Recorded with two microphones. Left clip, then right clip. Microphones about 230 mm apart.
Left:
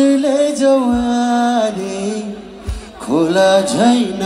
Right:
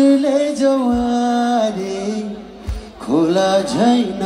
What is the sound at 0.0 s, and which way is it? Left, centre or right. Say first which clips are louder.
Music: left 1 dB; left.